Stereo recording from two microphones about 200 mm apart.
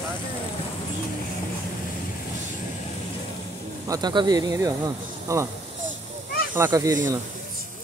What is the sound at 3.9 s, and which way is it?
Speech, 20° right (ahead or behind).